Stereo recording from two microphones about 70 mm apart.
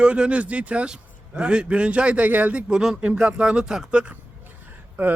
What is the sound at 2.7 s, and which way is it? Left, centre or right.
A man's voice, centre.